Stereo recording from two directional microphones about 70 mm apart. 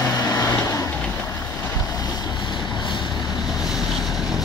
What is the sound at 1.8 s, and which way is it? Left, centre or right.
Vehicle, left.